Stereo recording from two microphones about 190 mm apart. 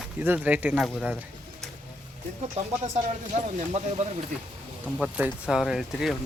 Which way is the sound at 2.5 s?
35° right (ahead or behind).